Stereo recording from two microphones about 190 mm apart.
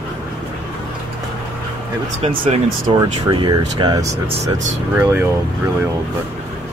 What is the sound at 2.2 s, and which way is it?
Speech, 30° right (ahead or behind).